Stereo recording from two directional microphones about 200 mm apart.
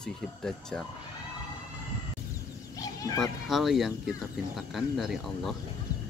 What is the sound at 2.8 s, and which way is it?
Goat, 15° left (ahead or behind).